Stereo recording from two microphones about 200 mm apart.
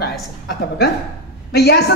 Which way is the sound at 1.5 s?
50° left (ahead or behind).